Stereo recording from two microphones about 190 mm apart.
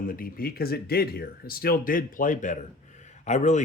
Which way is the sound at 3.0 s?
40° left (ahead or behind).